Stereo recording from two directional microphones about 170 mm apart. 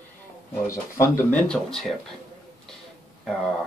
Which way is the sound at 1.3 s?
5° left (ahead or behind).